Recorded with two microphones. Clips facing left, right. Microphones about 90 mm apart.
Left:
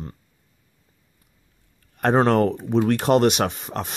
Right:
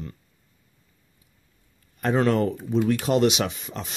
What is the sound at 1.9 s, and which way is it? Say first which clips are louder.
Speech: left 4 dB; 55° left (ahead or behind).